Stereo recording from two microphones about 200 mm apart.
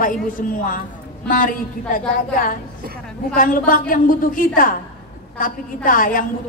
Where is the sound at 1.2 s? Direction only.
45° left (ahead or behind).